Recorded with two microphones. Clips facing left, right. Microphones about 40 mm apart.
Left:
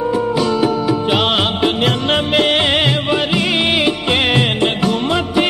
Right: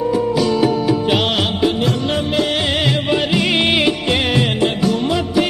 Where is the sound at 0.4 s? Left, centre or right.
Centre.